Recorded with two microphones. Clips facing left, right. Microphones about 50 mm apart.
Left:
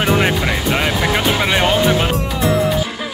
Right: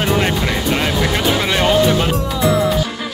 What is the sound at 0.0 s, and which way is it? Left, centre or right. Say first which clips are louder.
Speech: left 1 dB; centre.